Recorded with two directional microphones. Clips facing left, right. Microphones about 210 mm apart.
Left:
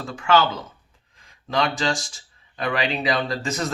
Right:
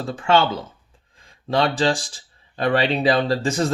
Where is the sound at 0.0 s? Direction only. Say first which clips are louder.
Right 1 dB; 30° right (ahead or behind).